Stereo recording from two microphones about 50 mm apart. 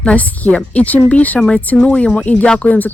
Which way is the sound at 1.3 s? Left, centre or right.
Centre.